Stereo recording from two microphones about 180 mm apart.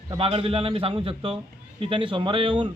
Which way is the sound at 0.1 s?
30° right (ahead or behind).